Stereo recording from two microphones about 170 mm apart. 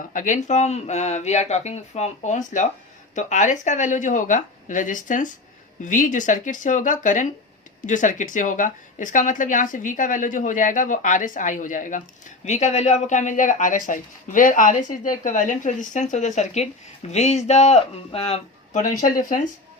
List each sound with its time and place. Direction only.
0.1 s speech: 50° left (ahead or behind)